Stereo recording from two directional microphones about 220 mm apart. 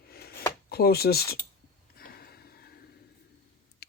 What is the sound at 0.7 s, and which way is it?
Speech, 45° left (ahead or behind).